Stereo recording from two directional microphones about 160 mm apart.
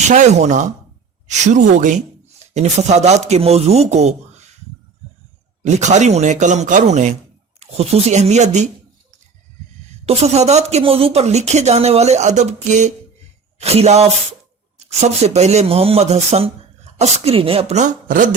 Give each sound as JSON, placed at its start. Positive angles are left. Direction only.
{"t": 0.1, "sound": "speech", "side_deg": -50}
{"t": 5.6, "sound": "speech", "side_deg": -45}
{"t": 10.1, "sound": "speech", "side_deg": -40}